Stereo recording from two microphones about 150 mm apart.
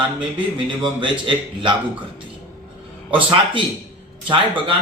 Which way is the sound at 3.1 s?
35° right (ahead or behind).